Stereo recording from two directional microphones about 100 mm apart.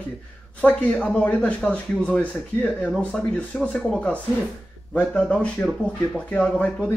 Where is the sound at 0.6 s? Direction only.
15° left (ahead or behind).